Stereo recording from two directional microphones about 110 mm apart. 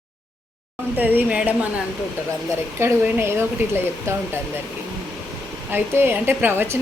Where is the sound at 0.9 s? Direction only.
15° right (ahead or behind).